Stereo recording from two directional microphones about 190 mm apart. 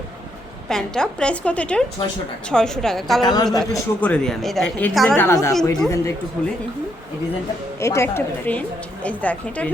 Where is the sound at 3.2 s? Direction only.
20° left (ahead or behind).